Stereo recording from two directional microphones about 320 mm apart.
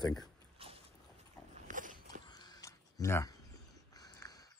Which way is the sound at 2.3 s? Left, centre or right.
Centre.